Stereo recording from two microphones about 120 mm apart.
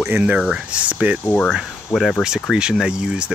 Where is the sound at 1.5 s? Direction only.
Centre (ahead or behind).